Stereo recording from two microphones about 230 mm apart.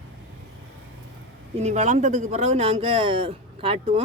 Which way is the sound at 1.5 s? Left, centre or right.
Right.